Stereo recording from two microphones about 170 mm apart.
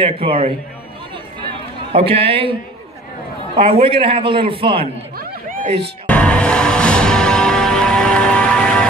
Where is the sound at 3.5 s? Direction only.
35° right (ahead or behind).